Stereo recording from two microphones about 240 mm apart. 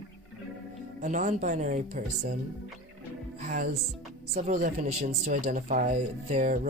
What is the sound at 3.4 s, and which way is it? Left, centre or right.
Speech, right.